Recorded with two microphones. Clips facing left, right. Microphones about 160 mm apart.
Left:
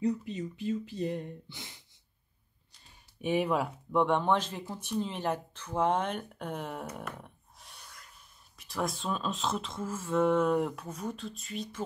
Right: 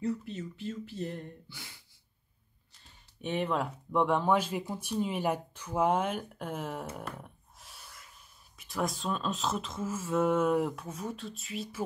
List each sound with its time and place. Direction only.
0.0 s speech: 15° left (ahead or behind)
3.2 s speech: 10° left (ahead or behind)